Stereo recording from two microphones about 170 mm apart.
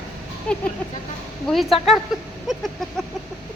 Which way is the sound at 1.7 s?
35° left (ahead or behind).